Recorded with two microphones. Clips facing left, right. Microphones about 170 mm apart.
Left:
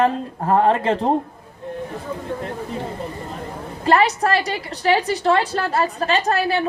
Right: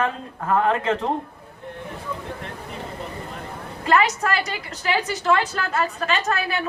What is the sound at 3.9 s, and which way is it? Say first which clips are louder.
A man's voice: left 3 dB; 35° left (ahead or behind).